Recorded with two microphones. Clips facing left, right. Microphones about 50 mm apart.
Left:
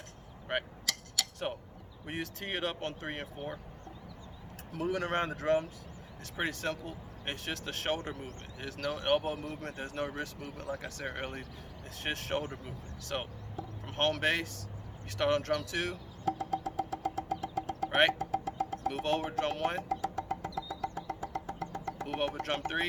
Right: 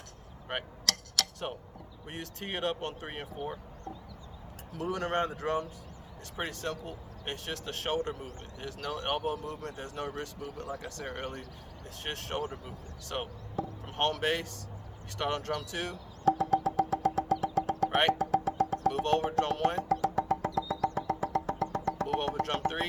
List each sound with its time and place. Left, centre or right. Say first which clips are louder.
0.9 s tick-tock: right 3 dB; right
2.0 s speech: left 2 dB; centre
4.7 s speech: even; centre
16.2 s music: right 7 dB; right
17.8 s music: left 1 dB; centre
18.3 s music: right 5 dB; right
18.9 s speech: right 3 dB; centre
19.9 s music: right 6 dB; right
22.1 s speech: even; centre